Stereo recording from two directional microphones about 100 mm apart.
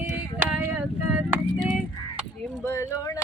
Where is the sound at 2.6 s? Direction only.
25° left (ahead or behind).